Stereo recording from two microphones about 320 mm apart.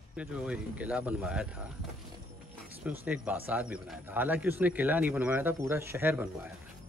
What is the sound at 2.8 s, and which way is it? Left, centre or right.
Speech, centre.